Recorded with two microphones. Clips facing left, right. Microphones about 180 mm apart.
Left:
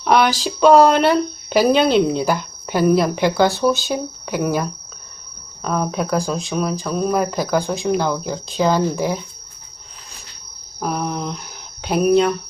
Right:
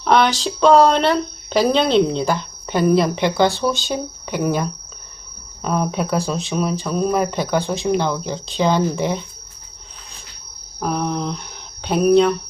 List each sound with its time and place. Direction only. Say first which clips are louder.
0.0 s speech: even; 5° left (ahead or behind)
10.8 s speech: right 1 dB; 5° left (ahead or behind)